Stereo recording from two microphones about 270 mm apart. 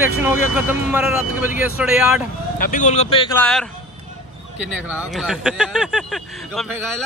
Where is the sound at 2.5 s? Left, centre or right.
Left.